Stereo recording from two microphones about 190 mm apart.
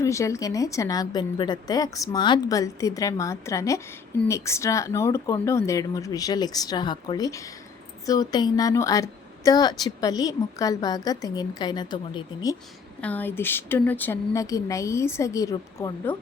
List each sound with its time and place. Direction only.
0.0 s a woman's voice: 15° left (ahead or behind)
13.0 s a woman's voice: 10° left (ahead or behind)